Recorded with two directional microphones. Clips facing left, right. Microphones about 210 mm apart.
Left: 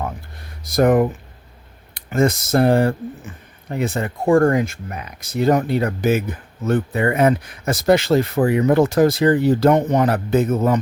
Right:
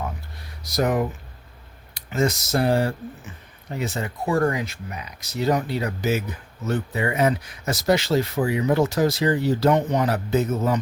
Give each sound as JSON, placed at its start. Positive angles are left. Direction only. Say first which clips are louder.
{"t": 0.6, "sound": "speech", "louder": "left 7 dB", "side_deg": 50}